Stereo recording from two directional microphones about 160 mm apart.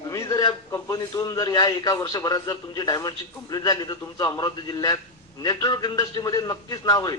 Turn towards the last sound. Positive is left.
turn(degrees=25)  # may be behind; listen again after turning